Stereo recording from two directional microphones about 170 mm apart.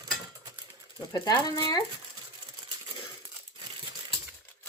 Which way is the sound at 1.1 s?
20° left (ahead or behind).